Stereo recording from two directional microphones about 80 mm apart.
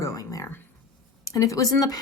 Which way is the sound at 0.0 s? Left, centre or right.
Left.